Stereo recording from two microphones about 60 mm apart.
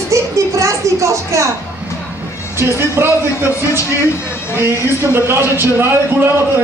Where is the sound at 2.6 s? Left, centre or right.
Right.